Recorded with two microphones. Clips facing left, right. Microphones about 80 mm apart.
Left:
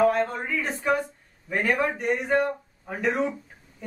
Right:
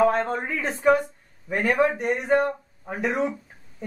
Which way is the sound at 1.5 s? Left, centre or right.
Right.